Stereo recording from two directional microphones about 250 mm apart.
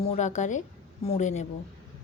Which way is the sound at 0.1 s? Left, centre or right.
Left.